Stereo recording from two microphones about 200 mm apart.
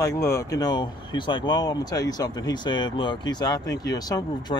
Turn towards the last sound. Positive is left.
turn(degrees=20)  # may be behind; listen again after turning